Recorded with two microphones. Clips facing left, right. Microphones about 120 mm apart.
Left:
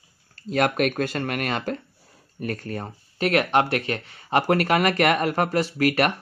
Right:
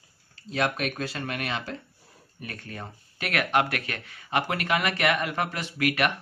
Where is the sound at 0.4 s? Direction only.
55° left (ahead or behind); by 6.1 s 40° left (ahead or behind).